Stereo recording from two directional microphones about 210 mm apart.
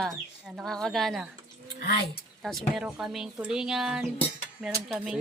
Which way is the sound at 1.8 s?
45° left (ahead or behind).